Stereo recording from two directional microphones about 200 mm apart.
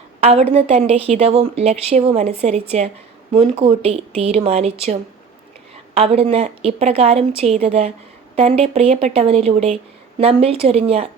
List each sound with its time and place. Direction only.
0.2 s a woman's voice: 30° right (ahead or behind)